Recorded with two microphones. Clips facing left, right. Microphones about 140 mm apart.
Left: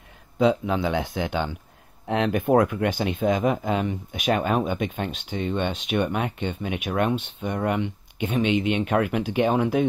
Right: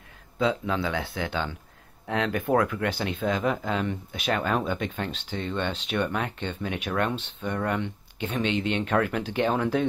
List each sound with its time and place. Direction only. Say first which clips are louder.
0.4 s speech: left 5 dB; 20° left (ahead or behind)